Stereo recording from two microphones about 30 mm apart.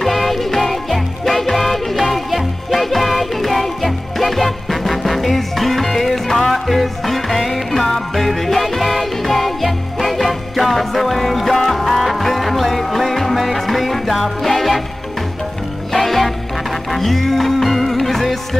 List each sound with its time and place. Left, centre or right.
0.0 s music: centre
15.9 s music: centre